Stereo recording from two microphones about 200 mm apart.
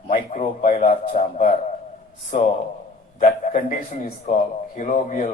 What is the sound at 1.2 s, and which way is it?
Speech, 35° left (ahead or behind).